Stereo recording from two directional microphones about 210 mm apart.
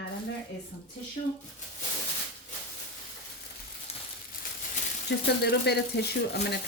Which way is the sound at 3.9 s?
30° left (ahead or behind).